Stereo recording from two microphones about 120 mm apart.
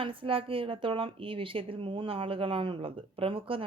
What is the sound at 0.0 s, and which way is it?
Speech, 45° right (ahead or behind).